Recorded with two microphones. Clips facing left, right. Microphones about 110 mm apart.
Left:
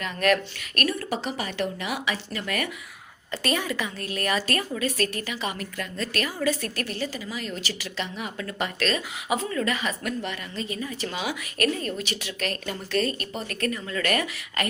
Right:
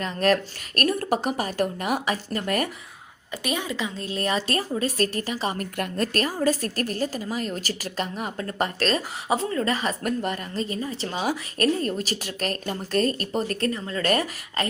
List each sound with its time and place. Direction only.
0.0 s a woman's voice: 35° right (ahead or behind)
0.8 s a woman's voice: 45° right (ahead or behind)
3.3 s a woman's voice: 15° right (ahead or behind); by 5.6 s 35° right (ahead or behind)
5.7 s a woman's voice: 55° right (ahead or behind)
6.1 s a woman's voice: 40° right (ahead or behind)